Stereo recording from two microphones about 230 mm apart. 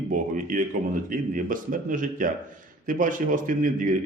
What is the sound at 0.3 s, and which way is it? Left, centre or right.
A man's voice, right.